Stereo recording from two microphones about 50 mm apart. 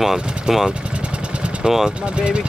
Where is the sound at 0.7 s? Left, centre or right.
Right.